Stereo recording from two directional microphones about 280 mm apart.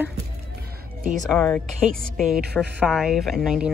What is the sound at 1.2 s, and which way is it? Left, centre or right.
Speech, centre.